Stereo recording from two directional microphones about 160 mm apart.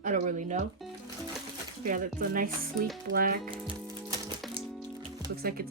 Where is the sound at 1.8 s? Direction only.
60° right (ahead or behind).